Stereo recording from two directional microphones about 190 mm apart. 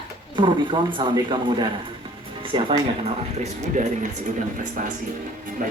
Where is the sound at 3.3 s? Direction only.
35° right (ahead or behind).